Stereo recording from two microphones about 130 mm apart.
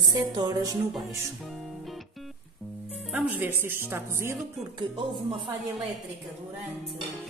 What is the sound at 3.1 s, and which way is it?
Speech, 10° right (ahead or behind).